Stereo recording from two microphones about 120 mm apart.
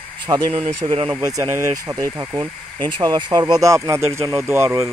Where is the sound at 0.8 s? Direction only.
50° right (ahead or behind).